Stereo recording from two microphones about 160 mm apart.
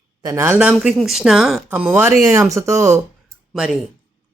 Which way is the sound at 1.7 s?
10° right (ahead or behind).